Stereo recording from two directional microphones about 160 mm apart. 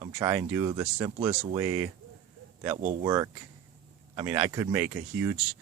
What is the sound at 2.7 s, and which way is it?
Speech, 50° right (ahead or behind).